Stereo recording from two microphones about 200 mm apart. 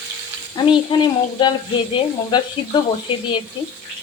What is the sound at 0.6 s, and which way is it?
Speech, 20° left (ahead or behind).